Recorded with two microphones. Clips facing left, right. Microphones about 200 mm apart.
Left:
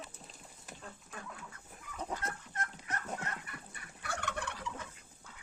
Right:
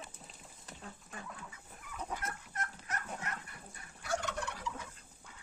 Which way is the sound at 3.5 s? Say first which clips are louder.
Left 3 dB; 65° left (ahead or behind).